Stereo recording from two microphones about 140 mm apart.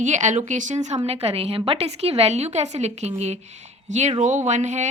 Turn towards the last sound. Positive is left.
turn(degrees=-55)  # may be behind; listen again after turning